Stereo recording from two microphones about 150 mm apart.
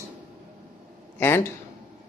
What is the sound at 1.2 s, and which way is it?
Speech, 15° left (ahead or behind).